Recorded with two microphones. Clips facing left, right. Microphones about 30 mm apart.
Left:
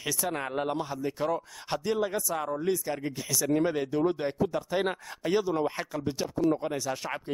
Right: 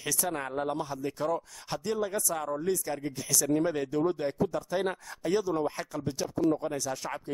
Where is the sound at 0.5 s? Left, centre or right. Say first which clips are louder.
Left 1 dB; left.